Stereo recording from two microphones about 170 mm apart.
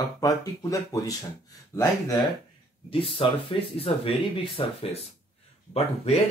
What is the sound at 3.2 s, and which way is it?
Speech, 30° left (ahead or behind).